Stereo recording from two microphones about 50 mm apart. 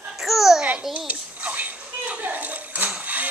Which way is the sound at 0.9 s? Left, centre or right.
Right.